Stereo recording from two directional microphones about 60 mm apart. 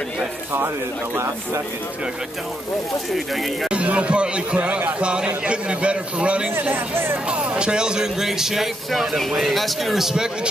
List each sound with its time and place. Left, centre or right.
1.1 s speech: right
3.6 s speech: right